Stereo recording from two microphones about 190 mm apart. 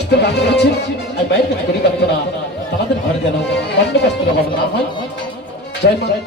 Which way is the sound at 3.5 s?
60° left (ahead or behind).